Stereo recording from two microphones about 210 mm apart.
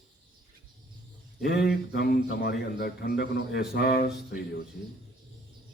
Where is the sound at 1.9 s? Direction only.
50° left (ahead or behind).